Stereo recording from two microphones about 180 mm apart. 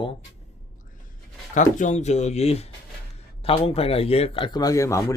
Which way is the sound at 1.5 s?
45° left (ahead or behind).